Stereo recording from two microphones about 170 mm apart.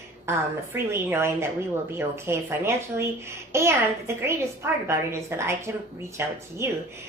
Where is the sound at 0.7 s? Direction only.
15° right (ahead or behind).